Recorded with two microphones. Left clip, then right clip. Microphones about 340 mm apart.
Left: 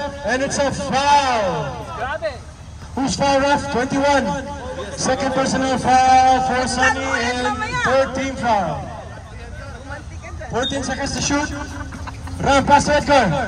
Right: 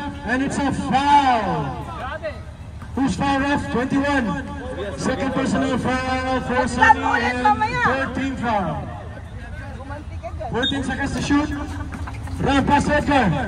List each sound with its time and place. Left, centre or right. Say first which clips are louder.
0.0 s a man's voice: left 3 dB; centre
6.8 s a man's voice: right 5 dB; centre
7.9 s a man's voice: left 5 dB; centre
10.5 s a man's voice: left 2 dB; centre